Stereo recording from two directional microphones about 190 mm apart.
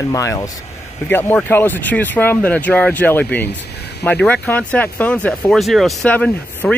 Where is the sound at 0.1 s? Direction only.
15° left (ahead or behind).